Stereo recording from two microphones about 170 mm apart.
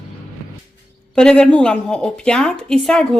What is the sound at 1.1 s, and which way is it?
Speech, 5° left (ahead or behind).